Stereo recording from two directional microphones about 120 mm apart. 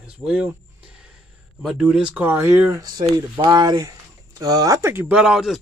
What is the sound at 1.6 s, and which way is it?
Speech, 5° right (ahead or behind).